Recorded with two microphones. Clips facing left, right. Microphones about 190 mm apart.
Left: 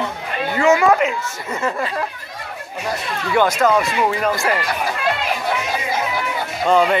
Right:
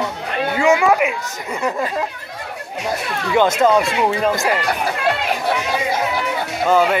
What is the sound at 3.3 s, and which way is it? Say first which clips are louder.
Speech: right 2 dB; 25° right (ahead or behind).